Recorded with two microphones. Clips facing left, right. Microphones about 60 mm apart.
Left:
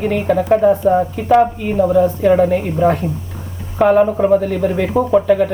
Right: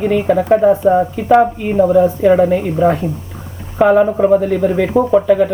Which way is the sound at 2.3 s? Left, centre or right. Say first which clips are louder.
Right 1 dB; centre.